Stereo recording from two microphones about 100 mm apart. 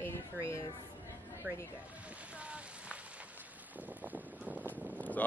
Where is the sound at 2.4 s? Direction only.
10° right (ahead or behind).